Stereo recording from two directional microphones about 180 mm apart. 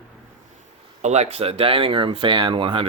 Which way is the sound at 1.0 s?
35° right (ahead or behind).